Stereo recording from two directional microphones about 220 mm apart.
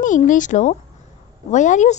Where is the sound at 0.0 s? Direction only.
35° left (ahead or behind).